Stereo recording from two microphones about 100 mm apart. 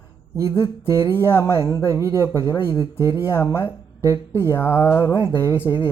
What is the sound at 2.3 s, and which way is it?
Speech, 45° left (ahead or behind).